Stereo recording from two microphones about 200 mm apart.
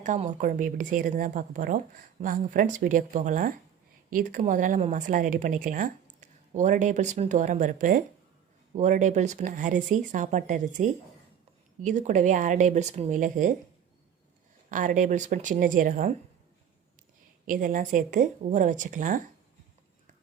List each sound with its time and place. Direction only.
0.0 s speech: 40° right (ahead or behind)
14.7 s speech: 40° right (ahead or behind)
17.4 s speech: 45° right (ahead or behind)